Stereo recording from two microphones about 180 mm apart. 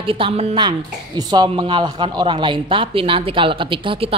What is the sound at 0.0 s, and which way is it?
Speech, 30° right (ahead or behind).